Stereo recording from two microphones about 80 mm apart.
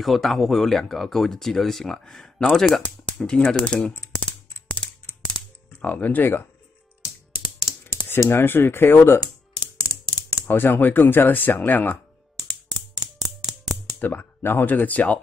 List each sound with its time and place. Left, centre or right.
0.0 s speech: centre
2.8 s speech: centre
3.9 s typing: left
5.2 s music: centre
8.1 s speech: left
9.2 s typing: left
10.4 s speech: left
13.9 s speech: left